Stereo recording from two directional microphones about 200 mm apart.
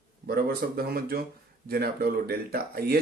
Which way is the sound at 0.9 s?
50° right (ahead or behind).